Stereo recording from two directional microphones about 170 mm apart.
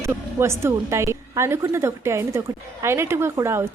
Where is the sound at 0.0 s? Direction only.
15° right (ahead or behind).